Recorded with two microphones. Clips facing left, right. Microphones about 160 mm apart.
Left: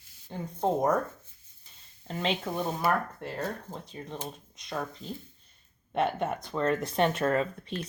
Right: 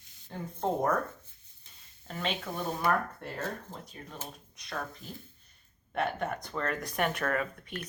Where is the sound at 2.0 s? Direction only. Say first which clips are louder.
Left 4 dB; 25° left (ahead or behind).